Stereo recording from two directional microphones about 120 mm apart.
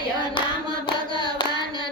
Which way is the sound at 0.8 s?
40° left (ahead or behind).